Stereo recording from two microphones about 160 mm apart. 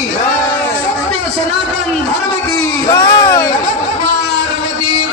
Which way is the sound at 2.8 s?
20° left (ahead or behind).